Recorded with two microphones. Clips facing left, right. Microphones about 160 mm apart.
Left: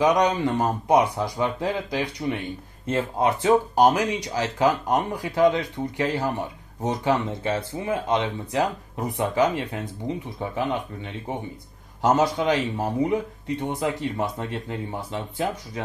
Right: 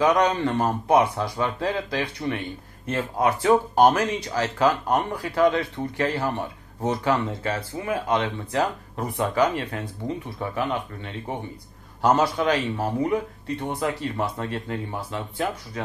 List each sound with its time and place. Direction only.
0.0 s speech: 15° left (ahead or behind)
2.9 s speech: 25° left (ahead or behind)
3.9 s speech: 15° left (ahead or behind)